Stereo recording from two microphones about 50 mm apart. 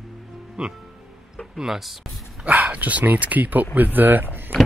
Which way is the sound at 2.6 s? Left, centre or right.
Right.